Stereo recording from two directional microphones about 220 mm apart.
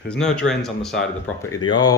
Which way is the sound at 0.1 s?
5° left (ahead or behind).